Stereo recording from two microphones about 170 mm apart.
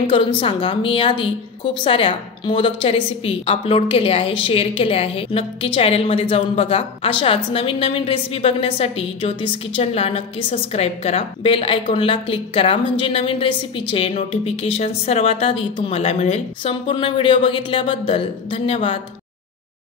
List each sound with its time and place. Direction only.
0.0 s a woman's voice: 30° left (ahead or behind)